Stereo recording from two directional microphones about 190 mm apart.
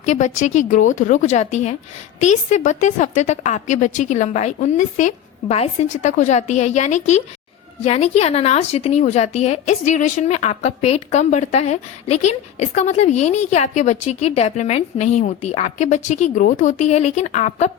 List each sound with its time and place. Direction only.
0.0 s a woman's voice: 40° left (ahead or behind)